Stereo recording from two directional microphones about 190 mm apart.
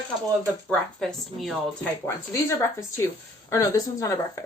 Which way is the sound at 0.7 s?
5° left (ahead or behind).